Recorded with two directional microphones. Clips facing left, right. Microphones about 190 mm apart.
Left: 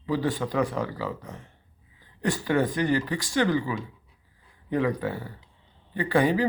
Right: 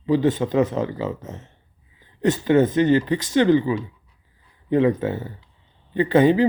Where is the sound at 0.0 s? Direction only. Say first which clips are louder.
Right 7 dB; 20° right (ahead or behind).